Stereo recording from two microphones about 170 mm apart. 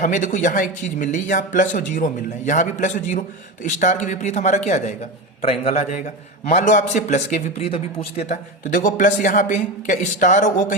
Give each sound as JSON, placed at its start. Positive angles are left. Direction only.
{"t": 0.0, "sound": "a man's voice", "side_deg": 50}
{"t": 8.7, "sound": "speech", "side_deg": 50}